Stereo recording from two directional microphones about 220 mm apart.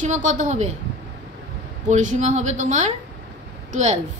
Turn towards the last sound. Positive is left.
turn(degrees=-30)  # may be behind; listen again after turning